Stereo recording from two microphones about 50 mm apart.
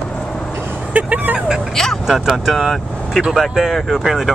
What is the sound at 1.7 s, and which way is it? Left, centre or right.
Speech, centre.